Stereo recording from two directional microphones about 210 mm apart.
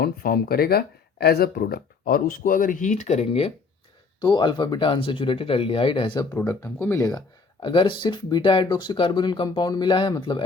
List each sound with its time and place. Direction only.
0.0 s speech: 45° left (ahead or behind); by 6.2 s 20° left (ahead or behind)
6.3 s speech: 10° left (ahead or behind)